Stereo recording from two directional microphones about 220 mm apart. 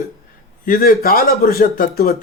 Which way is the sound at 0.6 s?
40° left (ahead or behind).